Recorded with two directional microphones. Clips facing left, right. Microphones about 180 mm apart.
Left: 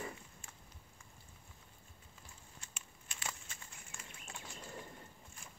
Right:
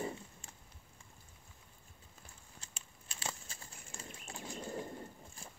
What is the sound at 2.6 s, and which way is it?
Bird flight, 30° right (ahead or behind).